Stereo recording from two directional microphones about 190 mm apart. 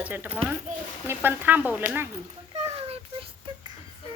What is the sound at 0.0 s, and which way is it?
Speech, 10° right (ahead or behind).